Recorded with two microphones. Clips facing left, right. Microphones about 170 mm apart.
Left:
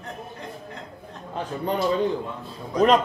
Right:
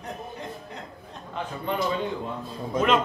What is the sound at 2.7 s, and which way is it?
Speech, 40° left (ahead or behind).